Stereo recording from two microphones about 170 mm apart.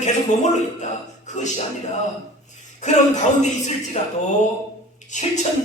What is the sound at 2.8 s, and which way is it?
Speech, 45° left (ahead or behind).